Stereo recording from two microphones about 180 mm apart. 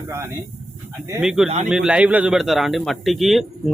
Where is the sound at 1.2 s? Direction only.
5° right (ahead or behind).